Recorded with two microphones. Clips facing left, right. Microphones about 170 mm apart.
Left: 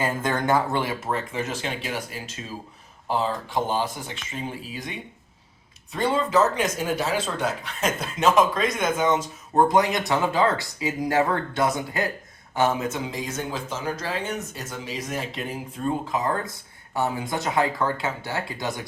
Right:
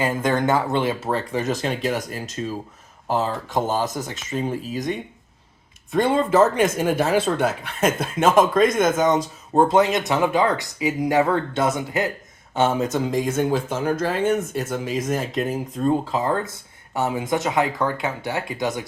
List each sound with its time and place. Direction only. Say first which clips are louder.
0.0 s speech: right 4 dB; 20° right (ahead or behind); by 9.2 s 40° right (ahead or behind)
9.6 s speech: right 3 dB; 25° right (ahead or behind)
12.9 s speech: right 8 dB; 50° right (ahead or behind)
16.1 s speech: right 3 dB; 25° right (ahead or behind)